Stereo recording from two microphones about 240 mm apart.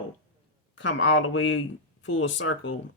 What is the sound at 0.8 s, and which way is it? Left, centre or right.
Speech, left.